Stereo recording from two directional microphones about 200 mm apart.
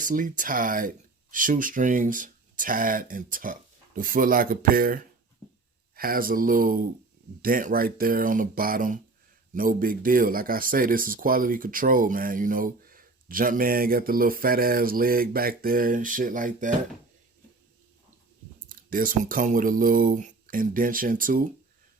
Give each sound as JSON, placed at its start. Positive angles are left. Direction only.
{"t": 0.0, "sound": "speech", "side_deg": -40}
{"t": 6.0, "sound": "speech", "side_deg": -45}
{"t": 18.7, "sound": "speech", "side_deg": -45}